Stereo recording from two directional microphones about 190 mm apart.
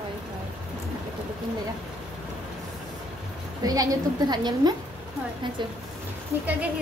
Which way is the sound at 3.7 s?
20° right (ahead or behind).